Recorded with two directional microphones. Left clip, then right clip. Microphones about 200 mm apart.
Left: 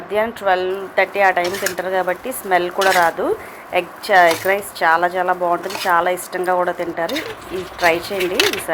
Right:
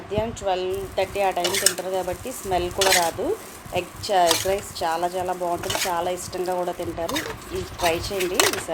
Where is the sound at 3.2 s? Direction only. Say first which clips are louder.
Left 6 dB; 5° left (ahead or behind).